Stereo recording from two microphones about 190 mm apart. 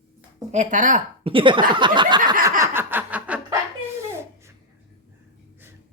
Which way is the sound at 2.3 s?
15° right (ahead or behind).